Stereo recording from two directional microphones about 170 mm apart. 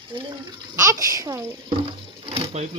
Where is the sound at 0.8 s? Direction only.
20° right (ahead or behind).